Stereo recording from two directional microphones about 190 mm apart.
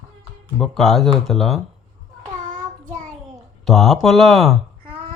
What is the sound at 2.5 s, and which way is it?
Child singing, 40° right (ahead or behind).